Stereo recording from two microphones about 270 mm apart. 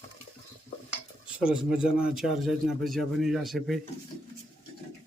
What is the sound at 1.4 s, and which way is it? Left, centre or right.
A man's voice, centre.